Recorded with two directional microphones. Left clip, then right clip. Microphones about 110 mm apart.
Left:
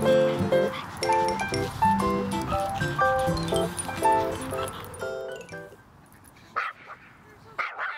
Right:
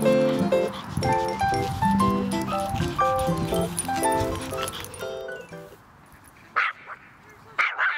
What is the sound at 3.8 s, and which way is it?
Music, 25° right (ahead or behind).